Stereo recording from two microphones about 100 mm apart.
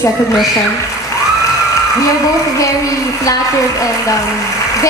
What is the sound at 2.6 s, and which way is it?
Speech, 35° left (ahead or behind).